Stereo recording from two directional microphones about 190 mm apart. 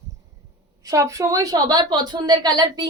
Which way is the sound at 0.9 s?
15° right (ahead or behind).